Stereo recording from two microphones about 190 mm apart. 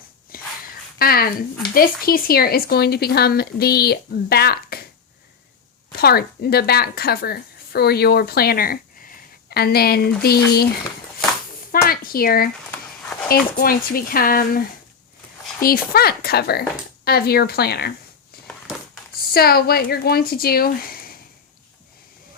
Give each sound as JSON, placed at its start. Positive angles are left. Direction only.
{"t": 0.3, "sound": "a sound", "side_deg": 50}
{"t": 0.9, "sound": "speech", "side_deg": 50}
{"t": 6.0, "sound": "a woman's voice", "side_deg": 55}
{"t": 11.9, "sound": "speech", "side_deg": 50}
{"t": 15.6, "sound": "speech", "side_deg": 50}
{"t": 19.3, "sound": "speech", "side_deg": 55}